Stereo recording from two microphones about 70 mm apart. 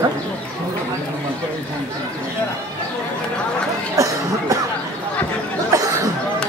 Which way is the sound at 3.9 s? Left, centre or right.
Right.